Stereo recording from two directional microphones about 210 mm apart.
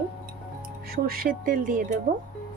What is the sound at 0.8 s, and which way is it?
Speech, 45° right (ahead or behind).